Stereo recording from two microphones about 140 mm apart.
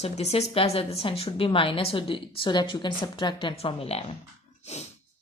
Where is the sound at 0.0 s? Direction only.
50° left (ahead or behind).